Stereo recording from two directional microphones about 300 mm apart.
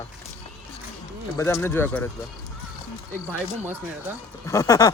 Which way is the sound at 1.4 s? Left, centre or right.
Centre.